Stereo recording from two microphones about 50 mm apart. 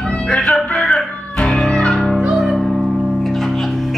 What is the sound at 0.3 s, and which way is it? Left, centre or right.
Music, centre.